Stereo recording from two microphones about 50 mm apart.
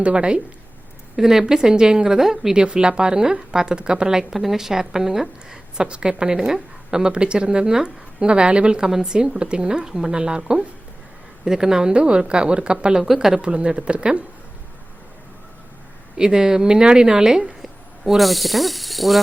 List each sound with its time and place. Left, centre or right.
0.0 s a woman's voice: right
16.1 s a woman's voice: centre